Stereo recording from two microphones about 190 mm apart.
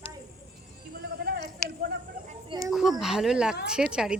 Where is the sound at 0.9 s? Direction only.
55° right (ahead or behind).